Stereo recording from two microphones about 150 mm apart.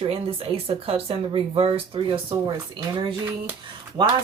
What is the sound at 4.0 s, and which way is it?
Speech, 30° right (ahead or behind).